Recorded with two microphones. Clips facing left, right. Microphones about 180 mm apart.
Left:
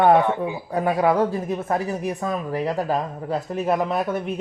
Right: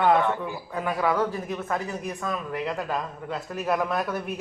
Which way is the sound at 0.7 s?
40° left (ahead or behind).